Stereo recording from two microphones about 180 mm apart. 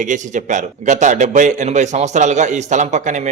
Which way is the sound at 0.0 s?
45° right (ahead or behind).